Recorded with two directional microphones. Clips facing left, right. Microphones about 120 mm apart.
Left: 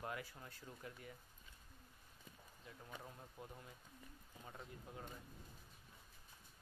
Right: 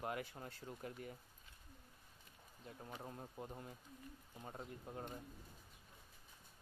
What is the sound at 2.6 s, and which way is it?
Speech, 30° right (ahead or behind).